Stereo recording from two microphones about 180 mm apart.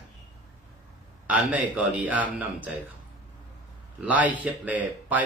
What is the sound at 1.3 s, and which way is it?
Speech, 10° right (ahead or behind).